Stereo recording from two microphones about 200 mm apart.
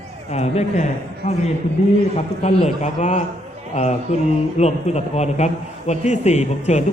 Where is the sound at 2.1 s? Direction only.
30° left (ahead or behind).